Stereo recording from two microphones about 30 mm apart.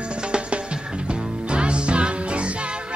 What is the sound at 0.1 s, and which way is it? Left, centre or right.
Music, right.